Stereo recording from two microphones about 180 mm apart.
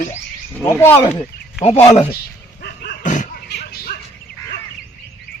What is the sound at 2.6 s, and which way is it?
Dog, 60° left (ahead or behind).